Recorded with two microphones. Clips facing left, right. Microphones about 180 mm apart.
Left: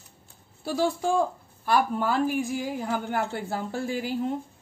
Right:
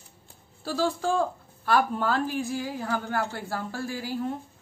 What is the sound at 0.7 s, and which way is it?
A woman's voice, 15° left (ahead or behind).